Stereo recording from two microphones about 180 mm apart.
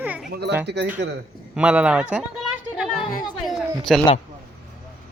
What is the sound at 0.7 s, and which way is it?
Speech, 70° right (ahead or behind).